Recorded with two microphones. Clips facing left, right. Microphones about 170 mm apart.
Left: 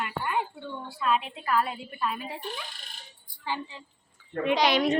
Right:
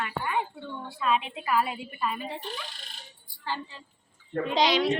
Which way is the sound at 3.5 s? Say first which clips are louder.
Left 1 dB; 15° left (ahead or behind).